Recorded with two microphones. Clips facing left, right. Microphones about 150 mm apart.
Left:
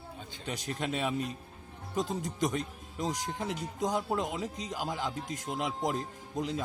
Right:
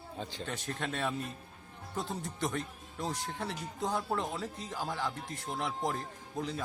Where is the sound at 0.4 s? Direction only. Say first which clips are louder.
Left 5 dB; 10° left (ahead or behind).